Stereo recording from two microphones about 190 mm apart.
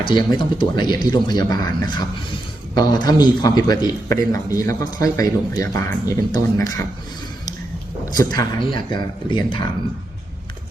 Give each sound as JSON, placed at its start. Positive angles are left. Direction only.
{"t": 0.0, "sound": "a man's voice", "side_deg": 25}
{"t": 8.1, "sound": "speech", "side_deg": 20}